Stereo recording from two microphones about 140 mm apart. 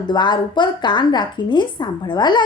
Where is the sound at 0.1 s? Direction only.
30° left (ahead or behind).